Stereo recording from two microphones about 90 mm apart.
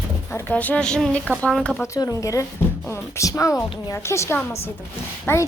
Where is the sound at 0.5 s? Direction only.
15° left (ahead or behind).